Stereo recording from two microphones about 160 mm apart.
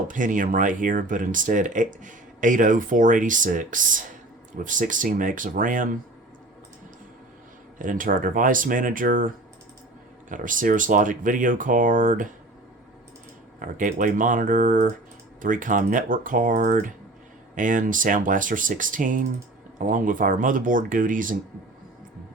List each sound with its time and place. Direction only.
0.1 s speech: 55° right (ahead or behind)
7.8 s speech: 55° right (ahead or behind)
13.6 s speech: 55° right (ahead or behind)